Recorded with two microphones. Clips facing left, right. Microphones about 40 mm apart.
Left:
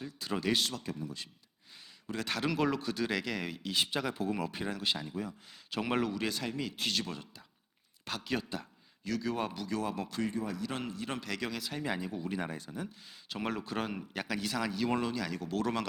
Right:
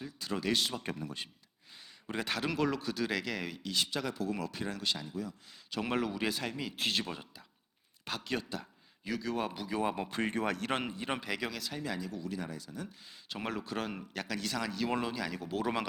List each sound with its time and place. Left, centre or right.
0.0 s speech: centre
2.2 s speech: centre
3.7 s speech: centre
5.8 s speech: centre
8.0 s speech: centre
9.6 s speech: centre
9.8 s a man's voice: right
10.2 s speech: right
10.8 s a man's voice: right
11.4 s speech: centre
11.8 s speech: left
13.1 s speech: centre